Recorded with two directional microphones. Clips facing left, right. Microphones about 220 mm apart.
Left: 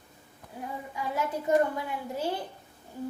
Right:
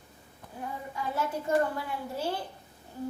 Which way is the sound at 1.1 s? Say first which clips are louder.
Left 2 dB; 15° left (ahead or behind).